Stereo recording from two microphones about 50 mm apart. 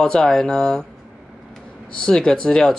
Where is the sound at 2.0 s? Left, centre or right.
Centre.